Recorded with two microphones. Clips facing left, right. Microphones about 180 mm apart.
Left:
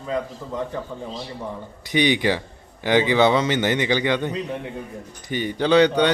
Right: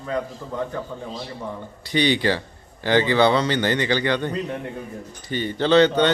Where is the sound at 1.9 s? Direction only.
15° left (ahead or behind).